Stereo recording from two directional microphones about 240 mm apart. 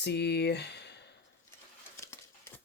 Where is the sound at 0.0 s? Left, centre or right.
Left.